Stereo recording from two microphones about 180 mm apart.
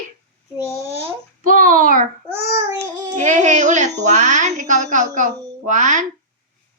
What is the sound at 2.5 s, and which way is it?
Child singing, 20° right (ahead or behind).